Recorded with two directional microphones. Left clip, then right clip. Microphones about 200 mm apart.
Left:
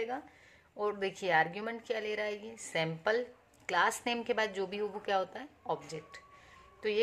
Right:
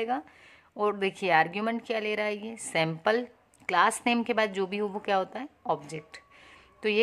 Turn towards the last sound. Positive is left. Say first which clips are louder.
# right 6 dB
turn(degrees=-45)  # may be behind; listen again after turning